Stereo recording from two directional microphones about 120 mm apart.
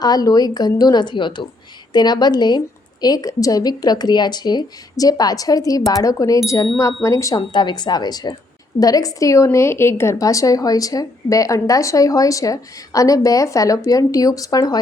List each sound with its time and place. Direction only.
0.0 s a woman's voice: 35° left (ahead or behind)